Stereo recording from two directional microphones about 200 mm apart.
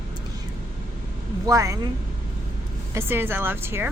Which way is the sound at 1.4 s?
15° right (ahead or behind).